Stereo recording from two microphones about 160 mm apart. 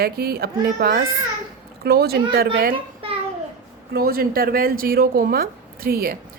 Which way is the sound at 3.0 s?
35° right (ahead or behind).